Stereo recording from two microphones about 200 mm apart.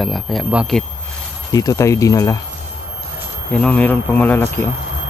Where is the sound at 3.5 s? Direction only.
5° left (ahead or behind).